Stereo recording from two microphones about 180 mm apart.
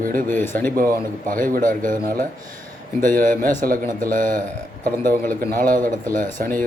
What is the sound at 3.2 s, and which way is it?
A man's voice, 50° right (ahead or behind).